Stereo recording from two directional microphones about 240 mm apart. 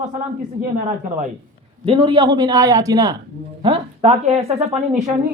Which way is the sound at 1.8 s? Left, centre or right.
Centre.